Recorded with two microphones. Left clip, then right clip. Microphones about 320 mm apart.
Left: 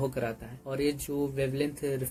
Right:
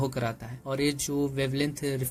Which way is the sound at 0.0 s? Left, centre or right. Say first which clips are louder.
Right 1 dB; right.